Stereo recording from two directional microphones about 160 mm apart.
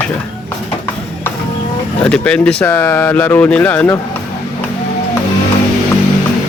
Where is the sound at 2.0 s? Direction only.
5° left (ahead or behind).